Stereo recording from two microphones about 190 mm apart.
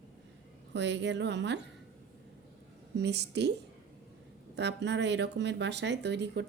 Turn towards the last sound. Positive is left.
turn(degrees=-65)  # may be behind; listen again after turning